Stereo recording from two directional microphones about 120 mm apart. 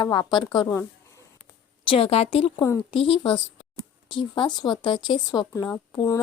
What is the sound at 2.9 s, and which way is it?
A woman's voice, 50° left (ahead or behind).